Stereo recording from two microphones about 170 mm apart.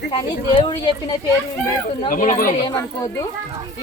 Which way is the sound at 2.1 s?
55° left (ahead or behind).